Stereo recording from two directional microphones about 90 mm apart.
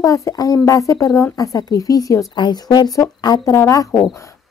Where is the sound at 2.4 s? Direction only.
50° left (ahead or behind).